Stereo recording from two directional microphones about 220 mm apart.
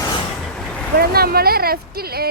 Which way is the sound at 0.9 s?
45° right (ahead or behind).